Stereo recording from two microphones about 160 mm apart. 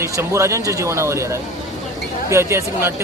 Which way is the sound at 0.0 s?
15° right (ahead or behind).